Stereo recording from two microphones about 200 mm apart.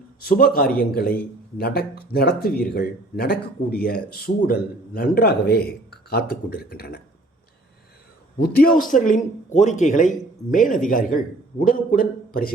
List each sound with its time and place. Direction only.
0.3 s speech: 45° left (ahead or behind)
8.4 s a man's voice: 45° left (ahead or behind)